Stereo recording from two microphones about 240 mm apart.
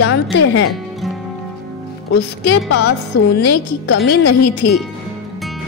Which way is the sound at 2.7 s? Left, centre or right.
Left.